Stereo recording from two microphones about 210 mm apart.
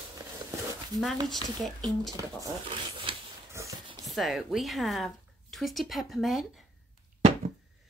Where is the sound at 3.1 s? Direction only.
25° right (ahead or behind).